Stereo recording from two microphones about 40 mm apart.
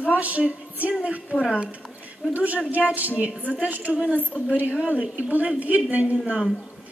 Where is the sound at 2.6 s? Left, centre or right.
Right.